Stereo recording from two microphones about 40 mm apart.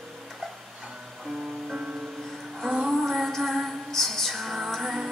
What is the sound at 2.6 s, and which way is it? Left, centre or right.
Child singing, centre.